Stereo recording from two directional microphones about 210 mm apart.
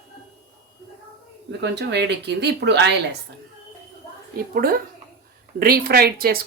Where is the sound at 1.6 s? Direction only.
55° right (ahead or behind).